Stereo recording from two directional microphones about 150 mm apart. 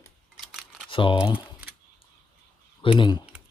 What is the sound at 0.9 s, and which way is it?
Speech, 35° left (ahead or behind).